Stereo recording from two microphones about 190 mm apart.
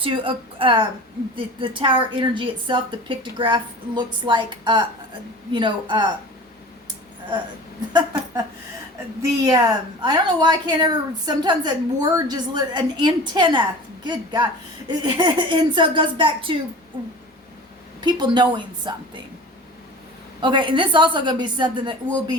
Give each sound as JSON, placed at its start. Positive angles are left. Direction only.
{"t": 0.0, "sound": "a woman's voice", "side_deg": -25}
{"t": 9.5, "sound": "a woman's voice", "side_deg": -20}
{"t": 18.0, "sound": "a woman's voice", "side_deg": -25}
{"t": 20.4, "sound": "a woman's voice", "side_deg": -25}